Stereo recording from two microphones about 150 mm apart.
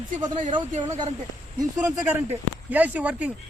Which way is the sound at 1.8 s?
10° right (ahead or behind).